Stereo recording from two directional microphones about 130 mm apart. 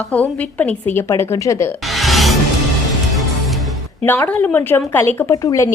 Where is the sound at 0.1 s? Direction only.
10° left (ahead or behind).